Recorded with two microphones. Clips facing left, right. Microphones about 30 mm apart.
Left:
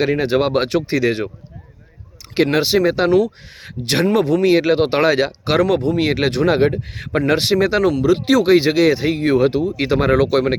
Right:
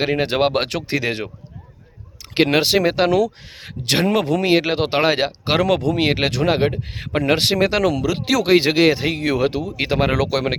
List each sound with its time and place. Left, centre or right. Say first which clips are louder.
0.0 s speech: left 2 dB; right
2.3 s speech: even; right
2.6 s speech: left 1 dB; right
4.5 s speech: left 3 dB; right
7.5 s speech: left 2 dB; right
8.4 s speech: right 1 dB; right
9.7 s speech: left 3 dB; right